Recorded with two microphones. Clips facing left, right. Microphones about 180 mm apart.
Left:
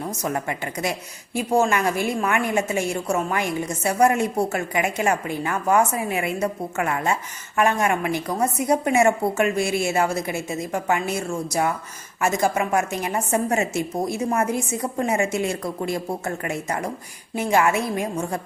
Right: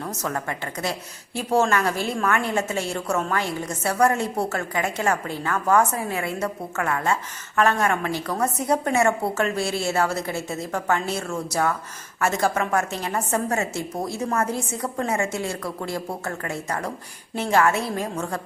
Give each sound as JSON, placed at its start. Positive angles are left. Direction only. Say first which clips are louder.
{"t": 0.0, "sound": "a woman's voice", "louder": "left 2 dB", "side_deg": 15}